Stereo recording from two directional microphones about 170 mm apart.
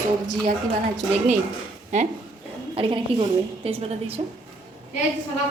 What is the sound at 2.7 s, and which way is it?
A woman's voice, 35° right (ahead or behind).